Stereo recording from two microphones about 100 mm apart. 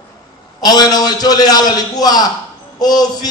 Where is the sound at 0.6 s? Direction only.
45° left (ahead or behind).